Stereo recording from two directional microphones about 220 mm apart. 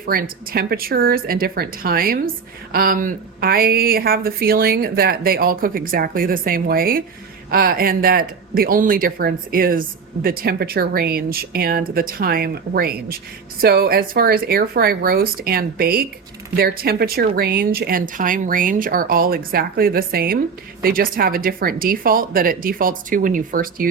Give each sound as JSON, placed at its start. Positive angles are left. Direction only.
{"t": 0.0, "sound": "speech", "side_deg": -40}